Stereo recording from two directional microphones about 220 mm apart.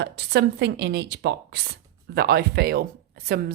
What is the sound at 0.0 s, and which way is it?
Speech, 50° right (ahead or behind).